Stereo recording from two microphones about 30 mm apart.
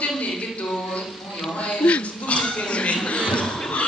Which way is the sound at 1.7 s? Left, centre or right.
Left.